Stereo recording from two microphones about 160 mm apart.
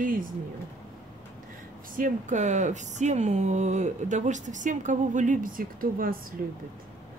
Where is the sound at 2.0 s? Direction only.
50° right (ahead or behind).